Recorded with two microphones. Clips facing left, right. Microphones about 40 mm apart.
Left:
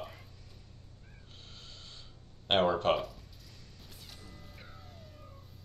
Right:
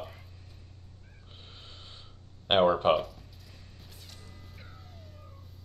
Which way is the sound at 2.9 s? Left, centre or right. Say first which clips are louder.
Right 4 dB; centre.